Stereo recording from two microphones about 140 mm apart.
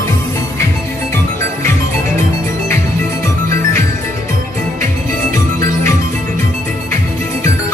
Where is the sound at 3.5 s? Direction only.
20° left (ahead or behind).